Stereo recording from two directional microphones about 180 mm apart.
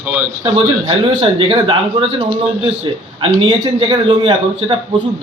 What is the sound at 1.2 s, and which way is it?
A man's voice, 30° right (ahead or behind).